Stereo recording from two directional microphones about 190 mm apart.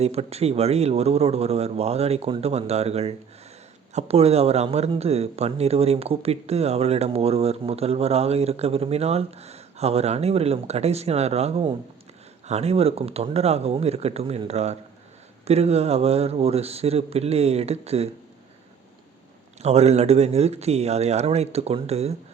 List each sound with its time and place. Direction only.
0.0 s speech: 35° right (ahead or behind)
19.6 s speech: 35° right (ahead or behind)